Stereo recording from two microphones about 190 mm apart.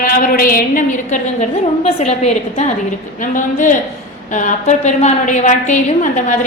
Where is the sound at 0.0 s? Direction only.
50° left (ahead or behind).